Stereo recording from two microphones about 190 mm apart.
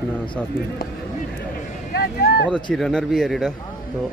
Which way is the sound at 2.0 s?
55° left (ahead or behind).